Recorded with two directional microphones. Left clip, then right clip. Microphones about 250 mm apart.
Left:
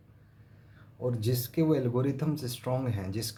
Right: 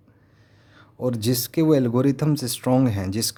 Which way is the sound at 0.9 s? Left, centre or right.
Right.